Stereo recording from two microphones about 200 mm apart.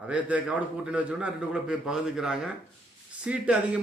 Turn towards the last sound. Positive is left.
turn(degrees=-5)  # may be behind; listen again after turning